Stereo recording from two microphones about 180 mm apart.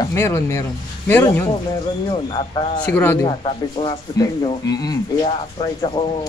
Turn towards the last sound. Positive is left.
turn(degrees=30)  # may be behind; listen again after turning